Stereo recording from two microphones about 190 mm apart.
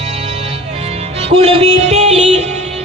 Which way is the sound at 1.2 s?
30° right (ahead or behind).